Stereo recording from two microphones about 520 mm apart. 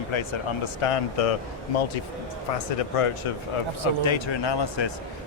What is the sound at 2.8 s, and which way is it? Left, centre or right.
Speech, left.